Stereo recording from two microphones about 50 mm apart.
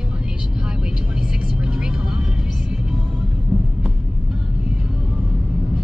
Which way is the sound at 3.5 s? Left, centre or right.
Centre.